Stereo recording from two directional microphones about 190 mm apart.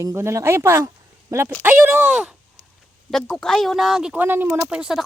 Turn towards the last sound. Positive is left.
turn(degrees=-5)  # may be behind; listen again after turning